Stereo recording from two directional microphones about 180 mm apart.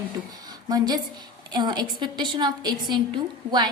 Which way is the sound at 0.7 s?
20° right (ahead or behind).